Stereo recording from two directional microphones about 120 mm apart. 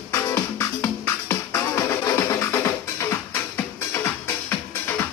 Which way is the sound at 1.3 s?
20° left (ahead or behind).